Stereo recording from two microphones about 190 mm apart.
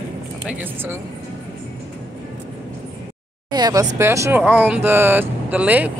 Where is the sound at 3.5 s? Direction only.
20° right (ahead or behind).